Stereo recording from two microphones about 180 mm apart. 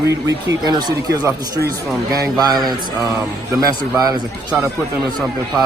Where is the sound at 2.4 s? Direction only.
20° right (ahead or behind).